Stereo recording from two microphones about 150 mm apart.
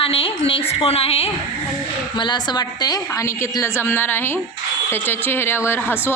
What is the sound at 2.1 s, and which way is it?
A woman's voice, 30° left (ahead or behind).